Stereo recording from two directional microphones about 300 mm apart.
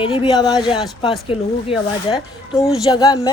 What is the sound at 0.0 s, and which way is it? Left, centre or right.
Speech, centre.